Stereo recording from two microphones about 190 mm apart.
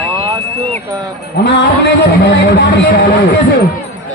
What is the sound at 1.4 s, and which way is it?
A man's voice, 65° left (ahead or behind).